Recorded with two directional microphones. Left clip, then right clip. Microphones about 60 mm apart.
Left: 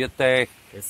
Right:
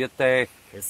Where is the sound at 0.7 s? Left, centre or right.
Right.